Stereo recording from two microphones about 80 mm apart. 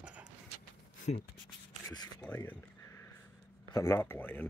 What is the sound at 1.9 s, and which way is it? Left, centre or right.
Speech, left.